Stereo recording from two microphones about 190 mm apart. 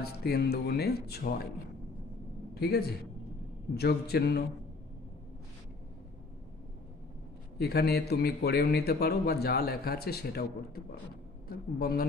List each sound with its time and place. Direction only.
0.0 s a man's voice: 55° left (ahead or behind)
2.6 s a man's voice: 55° left (ahead or behind)
7.5 s a man's voice: 55° left (ahead or behind)